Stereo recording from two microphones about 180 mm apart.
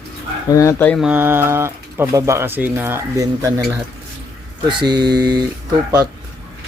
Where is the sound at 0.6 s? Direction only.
15° left (ahead or behind).